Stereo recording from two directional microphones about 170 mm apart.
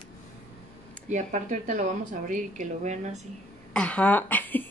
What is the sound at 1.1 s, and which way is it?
A woman's voice, 50° right (ahead or behind).